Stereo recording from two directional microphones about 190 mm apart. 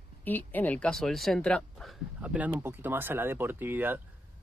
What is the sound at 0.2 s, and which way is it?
Speech, 10° left (ahead or behind).